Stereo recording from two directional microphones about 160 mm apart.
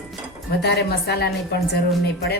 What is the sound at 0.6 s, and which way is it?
Speech, 85° left.